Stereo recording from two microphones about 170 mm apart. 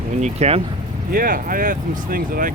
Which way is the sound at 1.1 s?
55° right (ahead or behind).